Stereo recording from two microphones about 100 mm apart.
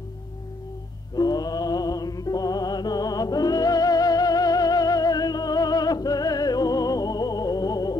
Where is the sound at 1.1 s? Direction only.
40° left (ahead or behind).